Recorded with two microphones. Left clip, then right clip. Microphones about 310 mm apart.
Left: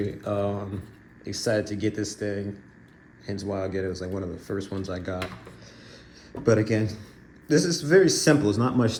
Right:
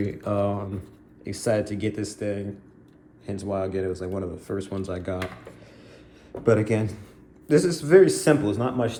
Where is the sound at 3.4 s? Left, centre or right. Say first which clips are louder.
Right 2 dB; right.